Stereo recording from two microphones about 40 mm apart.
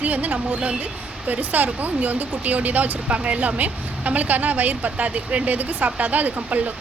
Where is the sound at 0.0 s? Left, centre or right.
Right.